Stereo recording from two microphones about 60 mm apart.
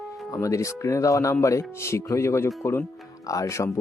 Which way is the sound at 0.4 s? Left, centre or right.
Left.